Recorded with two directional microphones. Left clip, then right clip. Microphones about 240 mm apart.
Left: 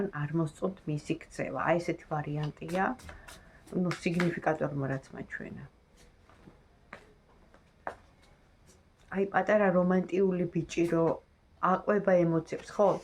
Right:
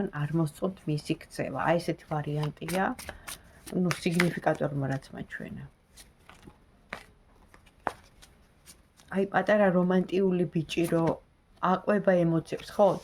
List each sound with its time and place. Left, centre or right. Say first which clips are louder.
0.0 s speech: right 1 dB; right
8.6 s speech: right 5 dB; right